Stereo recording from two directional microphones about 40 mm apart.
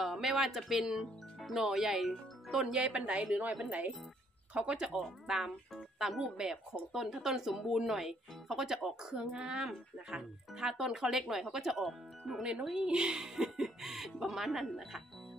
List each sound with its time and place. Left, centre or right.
0.0 s speech: centre
2.8 s speech: right
4.6 s speech: right
5.2 s speech: centre
8.8 s speech: right; by 12.4 s centre
12.7 s speech: right
13.2 s speech: centre